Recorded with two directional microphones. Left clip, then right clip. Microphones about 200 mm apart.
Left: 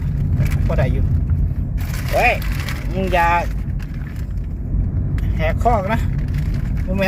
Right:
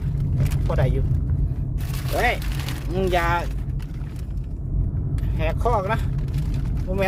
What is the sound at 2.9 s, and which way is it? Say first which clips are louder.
Speech: left 5 dB; 15° right (ahead or behind).